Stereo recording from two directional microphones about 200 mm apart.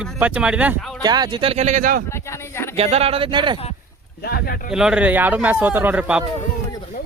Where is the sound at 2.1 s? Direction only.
15° left (ahead or behind).